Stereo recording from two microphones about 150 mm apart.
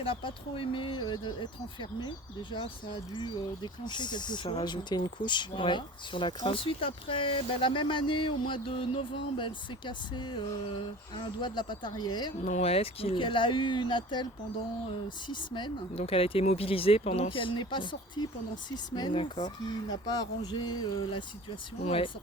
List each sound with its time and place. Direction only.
0.0 s speech: 35° left (ahead or behind)
12.5 s speech: 45° left (ahead or behind); by 14.3 s 30° left (ahead or behind)
15.3 s speech: 30° left (ahead or behind)